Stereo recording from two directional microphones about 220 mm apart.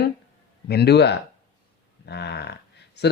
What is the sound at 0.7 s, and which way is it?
Speech, 45° left (ahead or behind).